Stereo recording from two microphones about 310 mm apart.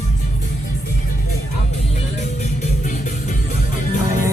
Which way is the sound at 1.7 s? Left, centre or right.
Left.